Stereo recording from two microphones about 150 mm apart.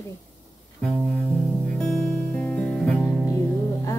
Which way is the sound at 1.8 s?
5° left (ahead or behind).